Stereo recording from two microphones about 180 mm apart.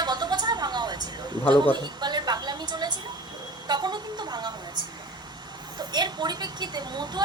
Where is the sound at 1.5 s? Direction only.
25° right (ahead or behind).